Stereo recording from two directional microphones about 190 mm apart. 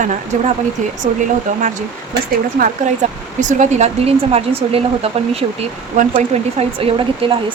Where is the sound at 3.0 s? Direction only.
40° right (ahead or behind).